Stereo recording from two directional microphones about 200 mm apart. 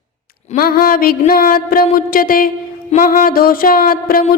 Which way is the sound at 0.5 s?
45° left (ahead or behind).